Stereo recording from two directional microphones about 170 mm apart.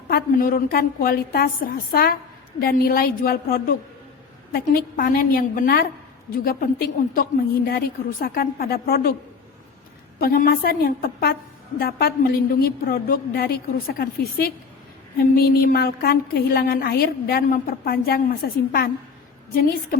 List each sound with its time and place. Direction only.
0.1 s a woman's voice: 60° left (ahead or behind)
10.2 s a woman's voice: 55° left (ahead or behind)